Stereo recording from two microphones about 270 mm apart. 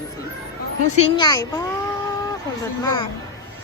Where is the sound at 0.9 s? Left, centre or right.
Centre.